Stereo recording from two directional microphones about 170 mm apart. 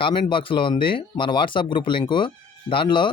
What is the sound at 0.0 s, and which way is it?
Speech, 30° left (ahead or behind).